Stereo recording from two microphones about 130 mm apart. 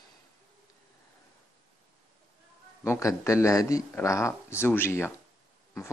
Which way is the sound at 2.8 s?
20° left (ahead or behind).